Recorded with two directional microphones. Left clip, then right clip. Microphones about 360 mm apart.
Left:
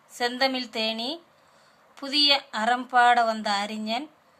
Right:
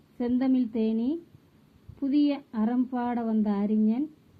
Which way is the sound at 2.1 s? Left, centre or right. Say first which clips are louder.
Left 6 dB; centre.